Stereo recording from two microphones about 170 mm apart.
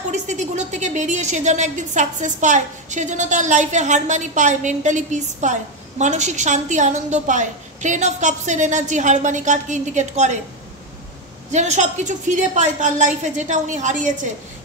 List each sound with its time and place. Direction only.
0.1 s a woman's voice: 45° right (ahead or behind)
11.5 s a woman's voice: 45° right (ahead or behind)